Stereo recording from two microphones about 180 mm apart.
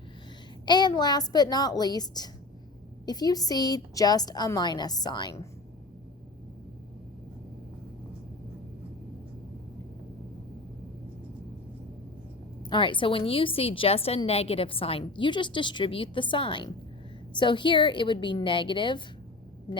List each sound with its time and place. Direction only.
0.6 s a woman's voice: 25° left (ahead or behind)
12.6 s a woman's voice: 25° left (ahead or behind)